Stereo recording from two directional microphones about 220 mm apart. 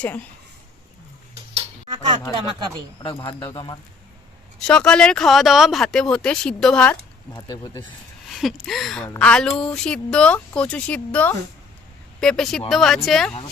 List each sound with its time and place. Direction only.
1.5 s tick-tock: 25° right (ahead or behind)
3.0 s speech: 20° left (ahead or behind)
4.6 s speech: 5° left (ahead or behind)
7.3 s speech: 20° left (ahead or behind)
8.3 s speech: centre (ahead or behind)